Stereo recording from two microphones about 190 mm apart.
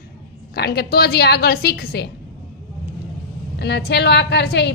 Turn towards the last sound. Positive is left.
turn(degrees=60)  # may be behind; listen again after turning